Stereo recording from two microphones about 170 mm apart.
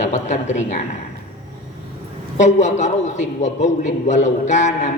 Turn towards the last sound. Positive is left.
turn(degrees=45)  # may be behind; listen again after turning